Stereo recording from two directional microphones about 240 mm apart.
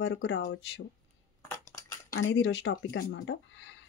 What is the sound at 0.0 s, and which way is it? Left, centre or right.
Speech, left.